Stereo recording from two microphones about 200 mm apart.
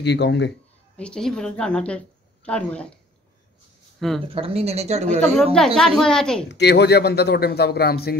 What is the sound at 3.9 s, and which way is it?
Speech, centre (ahead or behind).